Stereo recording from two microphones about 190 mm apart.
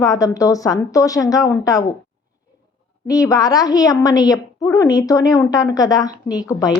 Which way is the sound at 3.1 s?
20° left (ahead or behind).